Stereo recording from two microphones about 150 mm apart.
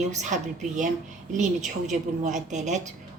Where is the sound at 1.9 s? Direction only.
50° right (ahead or behind).